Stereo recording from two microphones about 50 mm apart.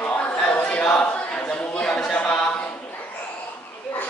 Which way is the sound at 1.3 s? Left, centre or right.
Left.